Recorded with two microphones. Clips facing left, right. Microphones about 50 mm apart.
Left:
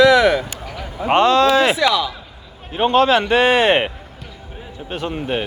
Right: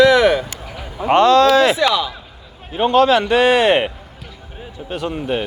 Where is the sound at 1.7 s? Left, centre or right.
Right.